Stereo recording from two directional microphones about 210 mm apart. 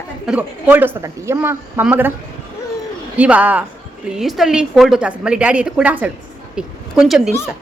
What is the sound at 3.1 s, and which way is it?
A woman's voice, 5° right (ahead or behind).